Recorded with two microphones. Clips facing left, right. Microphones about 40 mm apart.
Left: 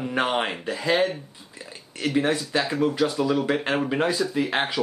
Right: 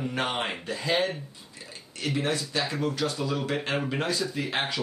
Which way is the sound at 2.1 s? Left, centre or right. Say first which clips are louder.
Left 6 dB; centre.